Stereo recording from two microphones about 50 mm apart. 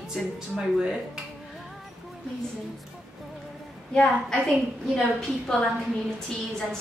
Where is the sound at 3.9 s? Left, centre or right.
Centre.